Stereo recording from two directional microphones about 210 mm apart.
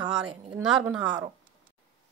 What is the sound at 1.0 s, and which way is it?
Speech, 20° right (ahead or behind).